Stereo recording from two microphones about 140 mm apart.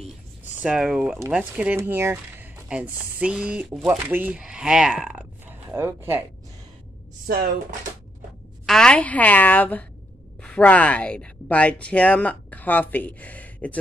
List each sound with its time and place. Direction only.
0.6 s speech: 5° right (ahead or behind)
1.8 s speech: 20° right (ahead or behind)
7.2 s speech: 90° right
8.6 s speech: 5° left (ahead or behind)